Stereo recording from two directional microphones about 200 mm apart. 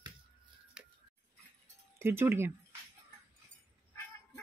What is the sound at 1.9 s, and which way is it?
Speech, 10° right (ahead or behind).